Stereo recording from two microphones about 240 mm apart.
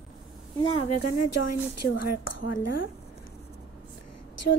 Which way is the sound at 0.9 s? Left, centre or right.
Left.